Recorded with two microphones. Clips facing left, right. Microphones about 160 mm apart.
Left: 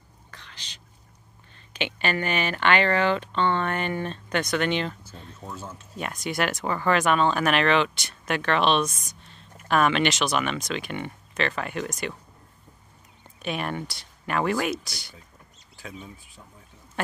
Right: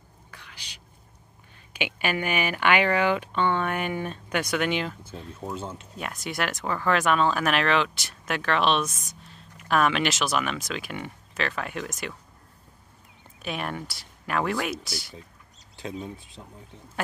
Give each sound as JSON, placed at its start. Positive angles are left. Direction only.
{"t": 0.3, "sound": "whispering", "side_deg": -10}
{"t": 1.7, "sound": "speech", "side_deg": -10}
{"t": 5.4, "sound": "speech", "side_deg": -25}
{"t": 5.9, "sound": "speech", "side_deg": 0}
{"t": 13.4, "sound": "speech", "side_deg": 0}
{"t": 15.8, "sound": "speech", "side_deg": -30}